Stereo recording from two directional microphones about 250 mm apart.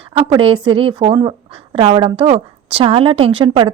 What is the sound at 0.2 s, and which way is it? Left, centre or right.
A woman's voice, right.